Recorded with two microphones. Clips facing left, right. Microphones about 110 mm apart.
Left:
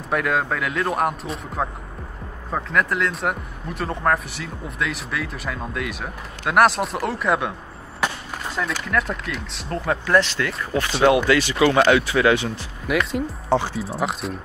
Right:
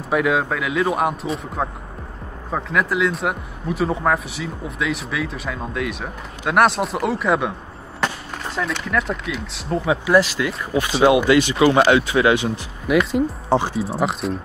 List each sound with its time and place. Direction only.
0.1 s speech: 5° right (ahead or behind)
12.8 s speech: centre (ahead or behind)
13.5 s speech: 20° right (ahead or behind)
13.8 s speech: centre (ahead or behind)